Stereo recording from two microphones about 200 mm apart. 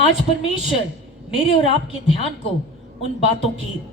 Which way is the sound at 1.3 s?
25° left (ahead or behind).